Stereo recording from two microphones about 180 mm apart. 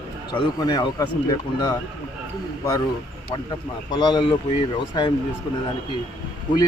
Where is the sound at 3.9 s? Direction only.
25° left (ahead or behind).